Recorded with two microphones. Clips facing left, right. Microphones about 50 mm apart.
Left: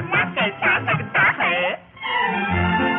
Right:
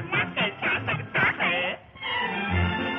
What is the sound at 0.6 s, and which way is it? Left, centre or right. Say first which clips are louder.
Music: left 11 dB; left.